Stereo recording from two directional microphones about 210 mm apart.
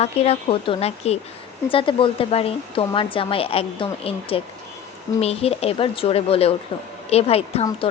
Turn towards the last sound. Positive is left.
turn(degrees=30)  # may be behind; listen again after turning